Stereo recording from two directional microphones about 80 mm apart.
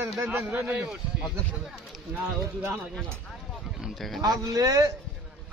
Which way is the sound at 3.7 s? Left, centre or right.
Centre.